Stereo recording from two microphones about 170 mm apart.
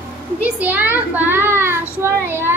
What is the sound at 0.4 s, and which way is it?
Child singing, 10° right (ahead or behind).